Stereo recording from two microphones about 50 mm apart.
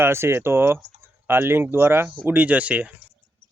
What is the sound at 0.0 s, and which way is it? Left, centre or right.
Speech, right.